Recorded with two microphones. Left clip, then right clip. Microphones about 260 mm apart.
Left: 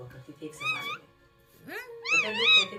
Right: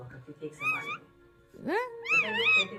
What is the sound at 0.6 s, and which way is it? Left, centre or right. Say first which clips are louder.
Music: even; centre.